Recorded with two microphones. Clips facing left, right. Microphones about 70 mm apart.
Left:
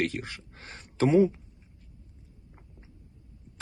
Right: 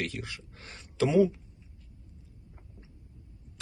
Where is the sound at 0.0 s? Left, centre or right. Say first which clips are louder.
Left 5 dB; left.